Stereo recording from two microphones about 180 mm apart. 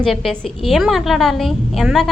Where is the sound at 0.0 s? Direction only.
Centre (ahead or behind).